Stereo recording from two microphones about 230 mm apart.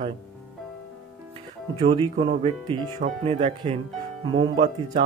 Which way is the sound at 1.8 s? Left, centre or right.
Right.